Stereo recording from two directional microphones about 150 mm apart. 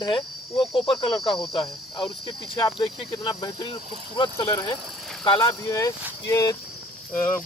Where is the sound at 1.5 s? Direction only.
30° left (ahead or behind).